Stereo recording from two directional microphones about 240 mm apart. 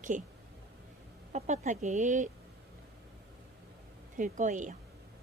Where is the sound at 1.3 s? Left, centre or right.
Right.